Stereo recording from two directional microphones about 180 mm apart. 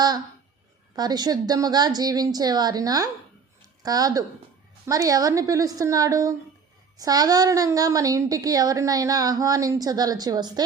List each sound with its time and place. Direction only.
0.9 s a woman's voice: 20° right (ahead or behind)